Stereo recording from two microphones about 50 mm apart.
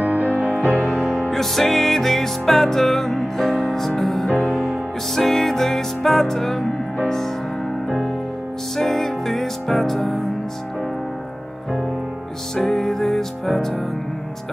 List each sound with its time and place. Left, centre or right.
0.0 s music: right
0.7 s music: centre
8.7 s music: centre
12.5 s music: centre